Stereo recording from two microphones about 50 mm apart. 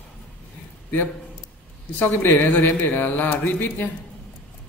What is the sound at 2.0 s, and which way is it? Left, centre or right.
Speech, left.